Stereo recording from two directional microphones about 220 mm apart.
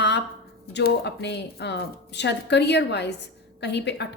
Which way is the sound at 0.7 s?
50° left (ahead or behind).